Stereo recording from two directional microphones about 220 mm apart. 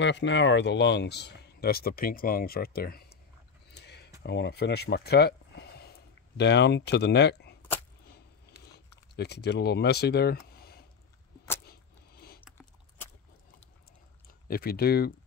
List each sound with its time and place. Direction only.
0.0 s speech: 55° left (ahead or behind)
3.7 s a sound: 50° left (ahead or behind)
4.2 s speech: 50° left (ahead or behind)
8.7 s speech: 50° left (ahead or behind)
11.6 s a sound: 45° left (ahead or behind)
14.5 s speech: 45° left (ahead or behind)